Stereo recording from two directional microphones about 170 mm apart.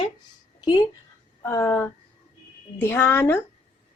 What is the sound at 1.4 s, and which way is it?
Speech, 15° left (ahead or behind).